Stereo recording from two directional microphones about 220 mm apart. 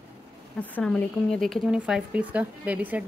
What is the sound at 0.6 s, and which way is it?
Speech, 5° left (ahead or behind).